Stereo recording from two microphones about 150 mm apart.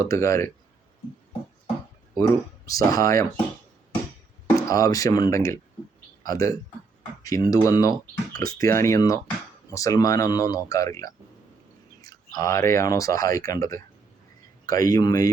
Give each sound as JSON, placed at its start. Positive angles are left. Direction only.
{"t": 0.0, "sound": "speech", "side_deg": 20}
{"t": 2.1, "sound": "speech", "side_deg": 25}
{"t": 4.5, "sound": "speech", "side_deg": 25}